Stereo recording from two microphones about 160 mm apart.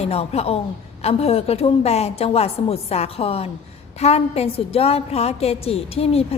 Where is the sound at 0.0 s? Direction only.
40° left (ahead or behind).